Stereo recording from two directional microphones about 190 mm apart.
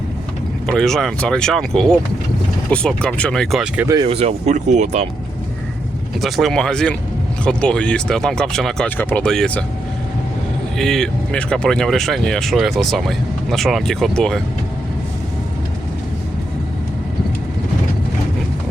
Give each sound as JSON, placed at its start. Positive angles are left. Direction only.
{"t": 0.7, "sound": "speech", "side_deg": 0}
{"t": 3.8, "sound": "speech", "side_deg": -25}
{"t": 6.2, "sound": "speech", "side_deg": 0}
{"t": 10.8, "sound": "speech", "side_deg": 0}